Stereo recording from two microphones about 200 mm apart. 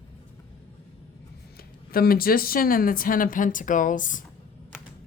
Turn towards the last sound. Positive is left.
turn(degrees=40)  # may be behind; listen again after turning